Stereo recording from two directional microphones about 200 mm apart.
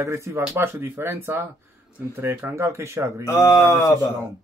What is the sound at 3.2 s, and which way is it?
Speech, 15° left (ahead or behind).